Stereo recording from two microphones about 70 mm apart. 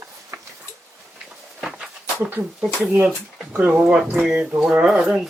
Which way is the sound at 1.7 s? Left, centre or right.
Centre.